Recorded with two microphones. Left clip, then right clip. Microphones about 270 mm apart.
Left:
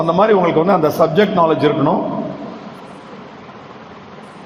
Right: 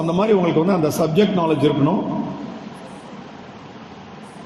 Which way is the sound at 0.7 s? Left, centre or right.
Centre.